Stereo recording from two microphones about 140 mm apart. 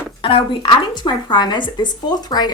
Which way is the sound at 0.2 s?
35° left (ahead or behind).